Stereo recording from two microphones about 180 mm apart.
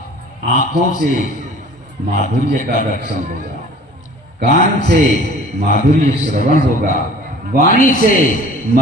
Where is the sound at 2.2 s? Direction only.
45° left (ahead or behind).